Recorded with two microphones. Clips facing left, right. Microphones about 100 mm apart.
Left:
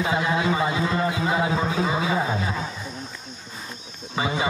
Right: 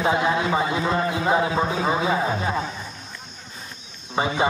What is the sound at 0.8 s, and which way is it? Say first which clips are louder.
Speech: right 2 dB; 30° right (ahead or behind).